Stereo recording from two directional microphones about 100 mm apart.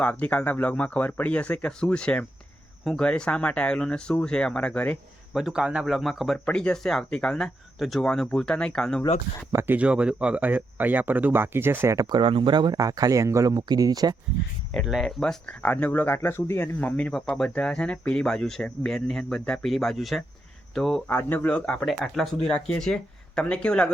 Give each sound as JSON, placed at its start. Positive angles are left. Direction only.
{"t": 0.0, "sound": "speech", "side_deg": 15}
{"t": 5.3, "sound": "a man's voice", "side_deg": -5}
{"t": 9.5, "sound": "speech", "side_deg": -25}
{"t": 9.7, "sound": "speech", "side_deg": -10}
{"t": 12.2, "sound": "speech", "side_deg": -55}
{"t": 12.7, "sound": "speech", "side_deg": -35}
{"t": 14.8, "sound": "a man's voice", "side_deg": -5}
{"t": 15.2, "sound": "a man's voice", "side_deg": 10}
{"t": 21.1, "sound": "speech", "side_deg": 20}
{"t": 21.8, "sound": "a man's voice", "side_deg": 0}